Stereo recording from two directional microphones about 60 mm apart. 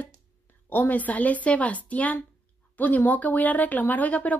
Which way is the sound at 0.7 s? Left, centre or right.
Left.